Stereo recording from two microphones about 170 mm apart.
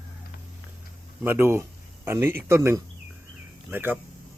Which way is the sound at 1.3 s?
15° right (ahead or behind).